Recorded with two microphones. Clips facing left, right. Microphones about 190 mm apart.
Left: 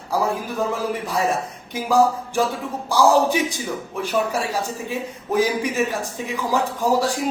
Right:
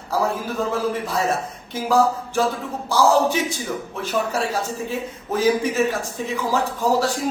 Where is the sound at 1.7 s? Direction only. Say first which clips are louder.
Left 1 dB; 15° left (ahead or behind).